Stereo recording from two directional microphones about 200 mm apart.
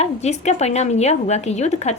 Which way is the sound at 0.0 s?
35° left (ahead or behind).